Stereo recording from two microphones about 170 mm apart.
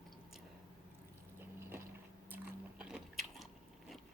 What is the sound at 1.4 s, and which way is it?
Water, 15° right (ahead or behind).